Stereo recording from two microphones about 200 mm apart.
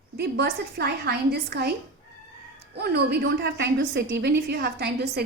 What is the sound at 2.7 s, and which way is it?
A woman's voice, 55° right (ahead or behind).